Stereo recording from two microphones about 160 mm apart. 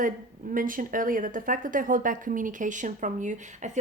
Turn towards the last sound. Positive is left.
turn(degrees=-50)  # may be behind; listen again after turning